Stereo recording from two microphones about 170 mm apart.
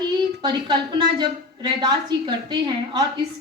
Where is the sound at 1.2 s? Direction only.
25° right (ahead or behind).